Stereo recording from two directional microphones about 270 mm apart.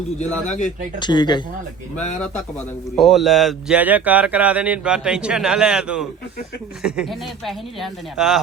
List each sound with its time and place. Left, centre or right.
0.9 s speech: centre
2.9 s speech: centre